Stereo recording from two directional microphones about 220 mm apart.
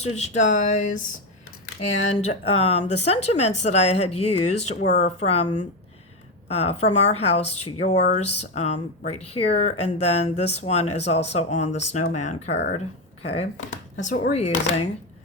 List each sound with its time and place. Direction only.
0.0 s speech: 30° left (ahead or behind)
13.6 s a sound: 60° left (ahead or behind)
14.0 s speech: 30° left (ahead or behind)